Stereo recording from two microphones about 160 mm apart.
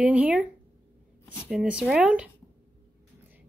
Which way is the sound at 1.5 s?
5° right (ahead or behind).